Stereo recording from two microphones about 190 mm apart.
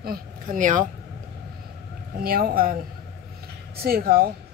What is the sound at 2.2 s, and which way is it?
Speech, 50° right (ahead or behind).